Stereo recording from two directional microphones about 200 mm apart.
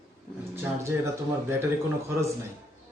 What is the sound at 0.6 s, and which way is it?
Speech, 15° right (ahead or behind).